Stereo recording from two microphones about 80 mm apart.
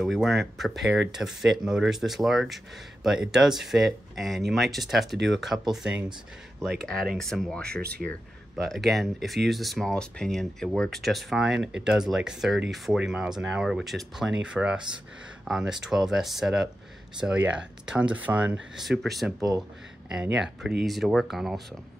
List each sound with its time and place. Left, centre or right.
0.0 s speech: centre
8.5 s speech: centre
17.2 s speech: centre
18.8 s speech: centre